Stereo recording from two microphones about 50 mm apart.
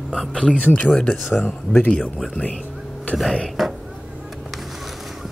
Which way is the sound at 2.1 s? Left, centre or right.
Centre.